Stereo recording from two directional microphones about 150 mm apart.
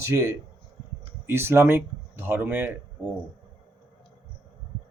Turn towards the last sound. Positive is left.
turn(degrees=-10)  # may be behind; listen again after turning